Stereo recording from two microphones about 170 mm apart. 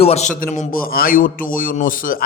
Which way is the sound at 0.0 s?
40° left (ahead or behind).